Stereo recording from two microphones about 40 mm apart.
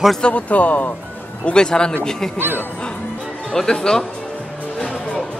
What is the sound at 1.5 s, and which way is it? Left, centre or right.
Speech, centre.